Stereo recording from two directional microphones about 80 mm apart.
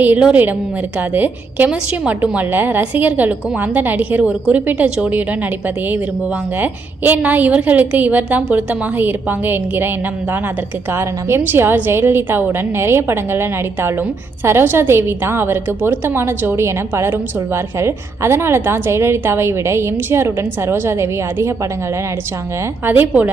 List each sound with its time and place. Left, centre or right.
0.0 s a woman's voice: centre; by 21.7 s right
22.9 s a woman's voice: right